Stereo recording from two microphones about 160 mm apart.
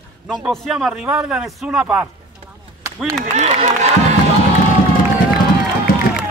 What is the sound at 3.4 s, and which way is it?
Speech, 45° right (ahead or behind).